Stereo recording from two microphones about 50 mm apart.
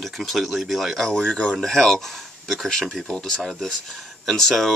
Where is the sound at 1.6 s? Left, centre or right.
Centre.